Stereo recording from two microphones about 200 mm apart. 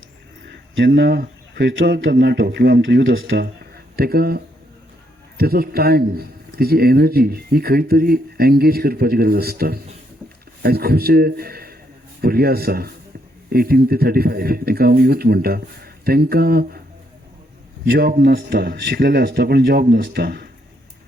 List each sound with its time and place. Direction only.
0.4 s speech: 55° right (ahead or behind)
3.0 s speech: 70° right (ahead or behind)
3.9 s a man's voice: 50° right (ahead or behind)
17.8 s a man's voice: 50° right (ahead or behind)